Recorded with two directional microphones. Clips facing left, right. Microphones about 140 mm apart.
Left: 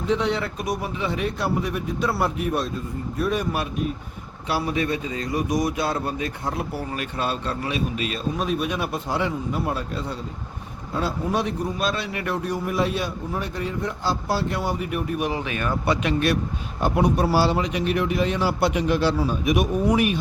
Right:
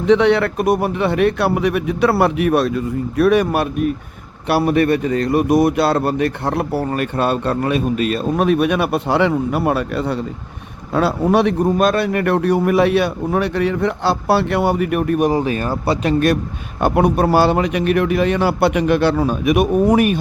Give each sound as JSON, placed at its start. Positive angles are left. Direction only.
{"t": 0.0, "sound": "a man's voice", "side_deg": -70}
{"t": 15.3, "sound": "speech", "side_deg": -35}
{"t": 16.8, "sound": "speech", "side_deg": -60}